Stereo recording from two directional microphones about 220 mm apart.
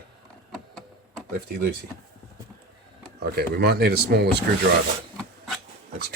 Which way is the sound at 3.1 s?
45° right (ahead or behind).